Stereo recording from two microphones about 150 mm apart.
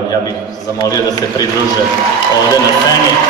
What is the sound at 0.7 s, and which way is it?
Speech, 25° left (ahead or behind).